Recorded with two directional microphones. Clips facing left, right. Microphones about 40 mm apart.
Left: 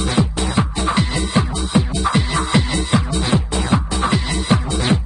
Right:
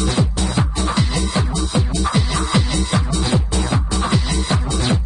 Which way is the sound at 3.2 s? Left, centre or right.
Left.